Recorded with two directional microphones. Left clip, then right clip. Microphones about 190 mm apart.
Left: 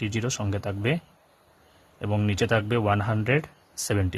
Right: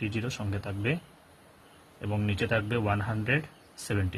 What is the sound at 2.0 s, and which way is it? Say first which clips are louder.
Speech: left 5 dB; 45° left (ahead or behind).